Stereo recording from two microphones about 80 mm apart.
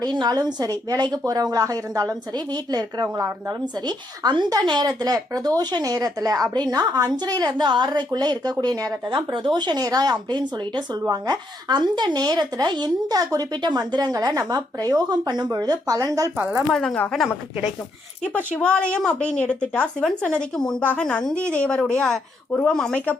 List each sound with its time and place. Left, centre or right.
0.0 s a woman's voice: right
3.8 s speech: right
9.0 s speech: right
11.1 s speech: right
16.7 s a woman's voice: centre
18.6 s a woman's voice: centre
20.0 s a woman's voice: centre